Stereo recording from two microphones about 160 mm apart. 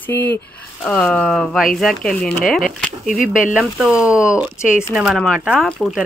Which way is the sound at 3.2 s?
55° left (ahead or behind).